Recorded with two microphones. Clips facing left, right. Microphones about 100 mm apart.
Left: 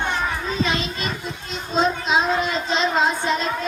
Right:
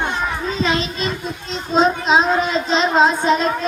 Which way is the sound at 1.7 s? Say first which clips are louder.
Right 5 dB; 20° right (ahead or behind).